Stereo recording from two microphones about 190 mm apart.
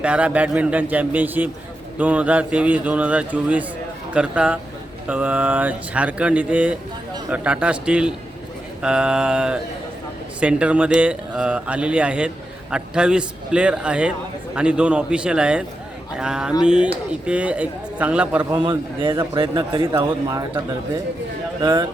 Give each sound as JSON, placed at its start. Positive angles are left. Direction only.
{"t": 0.0, "sound": "a man's voice", "side_deg": -5}
{"t": 19.0, "sound": "speech", "side_deg": -20}
{"t": 21.6, "sound": "speech", "side_deg": -20}